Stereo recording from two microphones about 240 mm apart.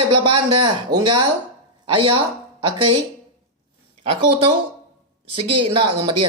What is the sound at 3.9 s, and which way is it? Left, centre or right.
A man's voice, right.